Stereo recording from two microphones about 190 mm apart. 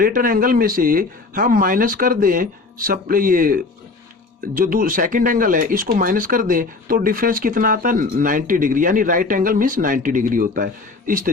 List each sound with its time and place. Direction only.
0.0 s speech: 50° right (ahead or behind)